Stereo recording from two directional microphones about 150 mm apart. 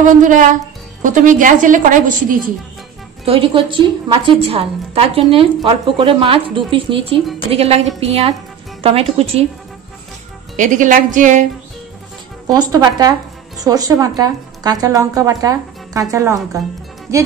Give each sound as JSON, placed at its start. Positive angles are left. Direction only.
{"t": 0.0, "sound": "a woman's voice", "side_deg": -60}
{"t": 3.3, "sound": "a woman's voice", "side_deg": -35}
{"t": 10.5, "sound": "a woman's voice", "side_deg": -60}
{"t": 12.5, "sound": "a woman's voice", "side_deg": -25}